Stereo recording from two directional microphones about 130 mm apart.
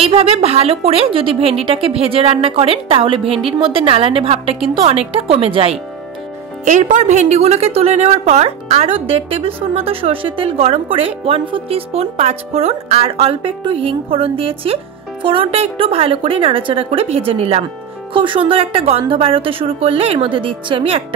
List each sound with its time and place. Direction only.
0.0 s a woman's voice: 45° right (ahead or behind)
6.6 s a woman's voice: 70° right (ahead or behind); by 21.0 s 45° right (ahead or behind)